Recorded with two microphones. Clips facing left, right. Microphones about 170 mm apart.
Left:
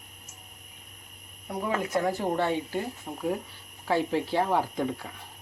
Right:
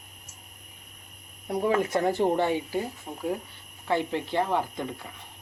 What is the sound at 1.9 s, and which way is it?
Speech, 25° right (ahead or behind).